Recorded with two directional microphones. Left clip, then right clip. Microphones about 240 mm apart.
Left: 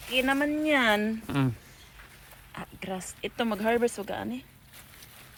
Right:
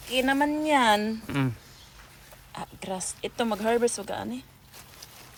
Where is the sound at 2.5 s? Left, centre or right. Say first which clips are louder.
Right 2 dB; centre.